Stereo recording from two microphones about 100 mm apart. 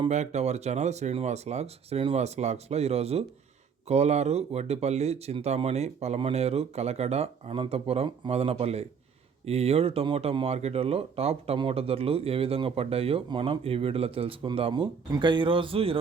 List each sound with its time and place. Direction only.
0.3 s speech: 90° right
10.4 s speech: 90° right
11.5 s speech: 70° right (ahead or behind)
13.2 s speech: 55° right (ahead or behind)
14.7 s speech: 50° right (ahead or behind); by 16.0 s 70° right (ahead or behind)